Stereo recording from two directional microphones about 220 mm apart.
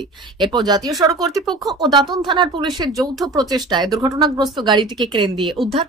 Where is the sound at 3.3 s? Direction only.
15° right (ahead or behind).